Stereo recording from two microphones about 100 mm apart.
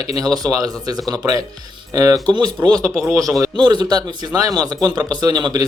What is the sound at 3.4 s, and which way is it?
A man's voice, 45° right (ahead or behind).